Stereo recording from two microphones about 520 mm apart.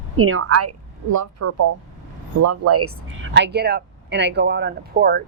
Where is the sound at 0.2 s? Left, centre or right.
Right.